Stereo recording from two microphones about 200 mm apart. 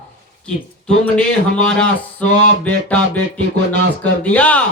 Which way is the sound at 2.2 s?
35° left (ahead or behind).